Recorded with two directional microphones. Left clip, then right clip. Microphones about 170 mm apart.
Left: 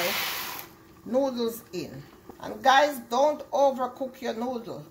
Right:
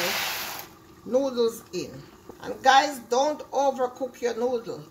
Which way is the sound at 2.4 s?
30° left (ahead or behind).